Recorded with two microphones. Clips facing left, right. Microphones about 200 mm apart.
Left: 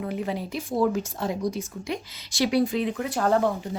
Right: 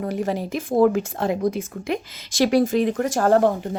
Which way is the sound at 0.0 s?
45° right (ahead or behind).